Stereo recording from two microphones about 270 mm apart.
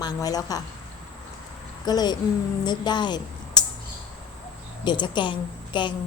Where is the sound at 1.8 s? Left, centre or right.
Centre.